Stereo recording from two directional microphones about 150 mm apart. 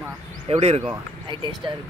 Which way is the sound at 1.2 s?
35° right (ahead or behind).